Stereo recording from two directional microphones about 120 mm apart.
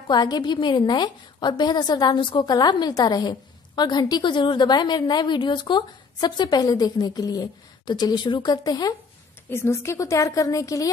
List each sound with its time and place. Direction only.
0.1 s a woman's voice: 35° left (ahead or behind)
9.5 s a woman's voice: 20° left (ahead or behind)